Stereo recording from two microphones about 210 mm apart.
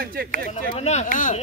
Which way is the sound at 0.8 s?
30° left (ahead or behind).